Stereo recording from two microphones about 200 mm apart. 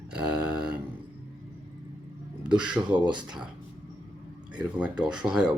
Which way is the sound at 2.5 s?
5° right (ahead or behind).